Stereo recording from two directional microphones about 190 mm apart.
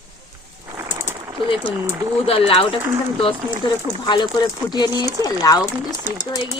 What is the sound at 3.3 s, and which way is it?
Speech, 25° right (ahead or behind).